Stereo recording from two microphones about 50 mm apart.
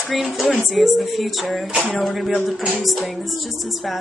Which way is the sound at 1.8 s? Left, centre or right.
Centre.